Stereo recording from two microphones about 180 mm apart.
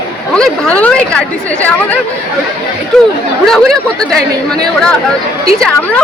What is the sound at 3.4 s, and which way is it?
A woman's voice, centre (ahead or behind).